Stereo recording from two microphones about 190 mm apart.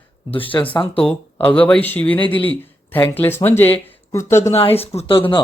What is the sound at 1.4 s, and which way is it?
Speech, 5° left (ahead or behind).